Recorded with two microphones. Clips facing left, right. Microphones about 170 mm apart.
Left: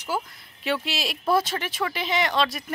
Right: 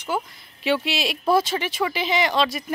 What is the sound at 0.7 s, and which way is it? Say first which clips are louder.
Speech: right 4 dB; centre (ahead or behind).